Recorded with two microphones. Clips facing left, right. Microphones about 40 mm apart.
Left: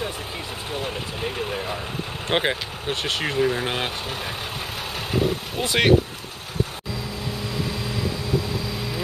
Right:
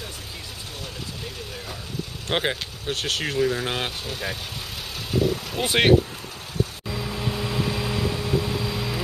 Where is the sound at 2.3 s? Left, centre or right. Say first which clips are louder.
Left 2 dB; centre.